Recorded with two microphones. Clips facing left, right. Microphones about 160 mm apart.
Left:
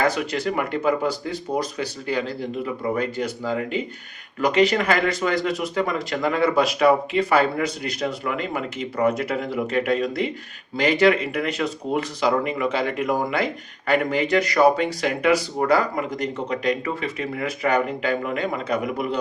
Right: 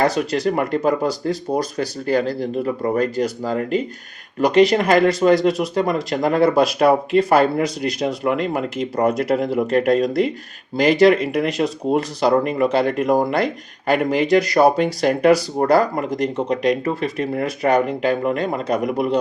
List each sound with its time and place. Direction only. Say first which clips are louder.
0.0 s speech: right 4 dB; 40° right (ahead or behind)
14.4 s speech: right 3 dB; 35° right (ahead or behind)